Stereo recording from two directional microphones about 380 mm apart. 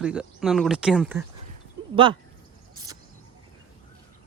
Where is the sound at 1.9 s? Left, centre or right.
Centre.